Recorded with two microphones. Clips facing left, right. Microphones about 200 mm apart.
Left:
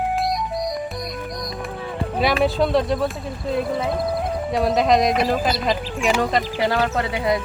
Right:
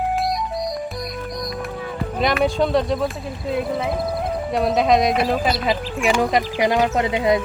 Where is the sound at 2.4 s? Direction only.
Centre (ahead or behind).